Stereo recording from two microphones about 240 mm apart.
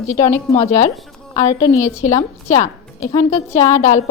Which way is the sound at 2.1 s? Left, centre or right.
Left.